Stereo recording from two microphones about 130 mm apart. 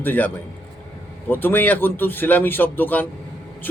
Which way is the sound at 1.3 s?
15° left (ahead or behind).